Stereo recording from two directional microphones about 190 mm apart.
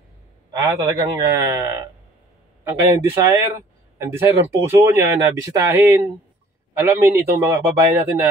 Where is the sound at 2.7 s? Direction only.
10° right (ahead or behind).